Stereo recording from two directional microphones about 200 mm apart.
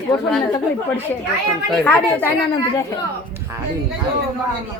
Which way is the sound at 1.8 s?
5° left (ahead or behind).